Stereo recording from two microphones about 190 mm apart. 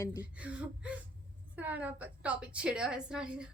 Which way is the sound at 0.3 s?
5° right (ahead or behind).